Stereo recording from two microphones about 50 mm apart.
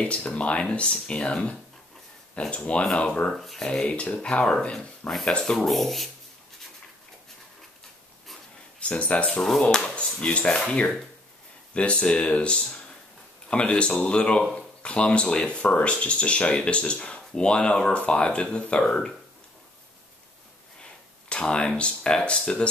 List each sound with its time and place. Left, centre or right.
0.0 s speech: left
3.3 s speech: centre
3.8 s speech: left; by 6.0 s centre
8.7 s speech: left
9.6 s speech: centre
11.7 s speech: left
21.3 s speech: centre